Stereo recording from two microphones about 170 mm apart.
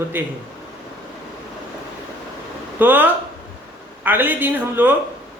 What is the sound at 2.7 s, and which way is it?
A man's voice, 10° right (ahead or behind).